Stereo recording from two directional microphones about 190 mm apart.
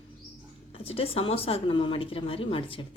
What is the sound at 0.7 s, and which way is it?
Speech, 30° left (ahead or behind).